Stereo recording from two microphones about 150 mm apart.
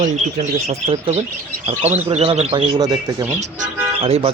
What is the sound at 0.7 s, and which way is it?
Speech, 45° right (ahead or behind).